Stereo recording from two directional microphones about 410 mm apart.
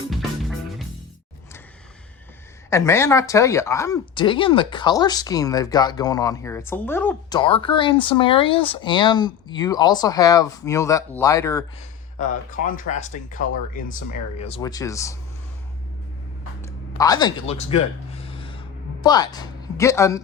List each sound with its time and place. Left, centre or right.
2.6 s speech: centre
12.2 s speech: centre
16.6 s a sound: centre
19.0 s speech: centre